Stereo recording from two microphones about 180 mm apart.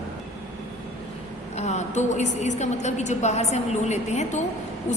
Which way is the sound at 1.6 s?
40° left (ahead or behind).